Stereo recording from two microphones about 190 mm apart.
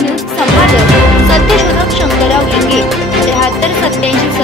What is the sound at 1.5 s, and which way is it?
Music, centre (ahead or behind).